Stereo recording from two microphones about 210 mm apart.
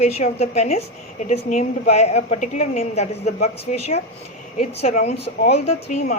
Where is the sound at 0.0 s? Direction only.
30° left (ahead or behind).